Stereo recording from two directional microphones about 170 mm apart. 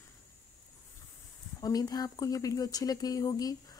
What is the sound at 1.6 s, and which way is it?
Speech, 20° left (ahead or behind).